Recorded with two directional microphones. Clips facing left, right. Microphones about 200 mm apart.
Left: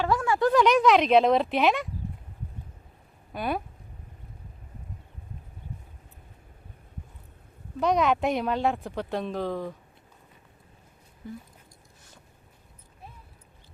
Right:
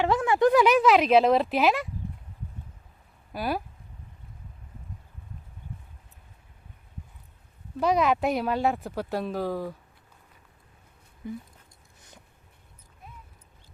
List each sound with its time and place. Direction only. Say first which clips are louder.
0.0 s a sound: right 2 dB; 20° right (ahead or behind)
0.5 s speech: left 2 dB; 5° right (ahead or behind)
3.3 s speech: even; 5° right (ahead or behind)
7.8 s speech: even; centre (ahead or behind)